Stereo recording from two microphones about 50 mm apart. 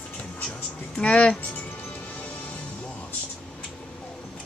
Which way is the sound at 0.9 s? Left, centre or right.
Left.